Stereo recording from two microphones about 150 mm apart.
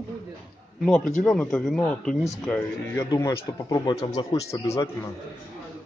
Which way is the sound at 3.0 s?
20° left (ahead or behind).